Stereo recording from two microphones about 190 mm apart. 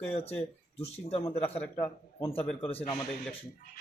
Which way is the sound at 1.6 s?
10° left (ahead or behind).